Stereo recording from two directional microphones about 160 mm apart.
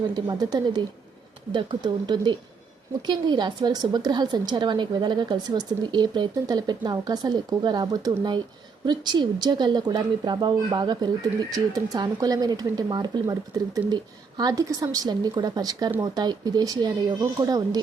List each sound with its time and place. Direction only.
0.3 s a woman's voice: 25° right (ahead or behind)